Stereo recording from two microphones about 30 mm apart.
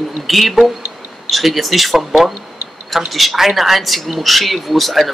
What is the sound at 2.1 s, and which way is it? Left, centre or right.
Speech, centre.